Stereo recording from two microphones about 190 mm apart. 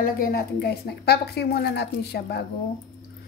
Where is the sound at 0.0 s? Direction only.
50° left (ahead or behind).